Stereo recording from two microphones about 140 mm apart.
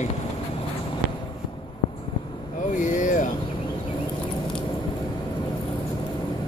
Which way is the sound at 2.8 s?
65° left (ahead or behind).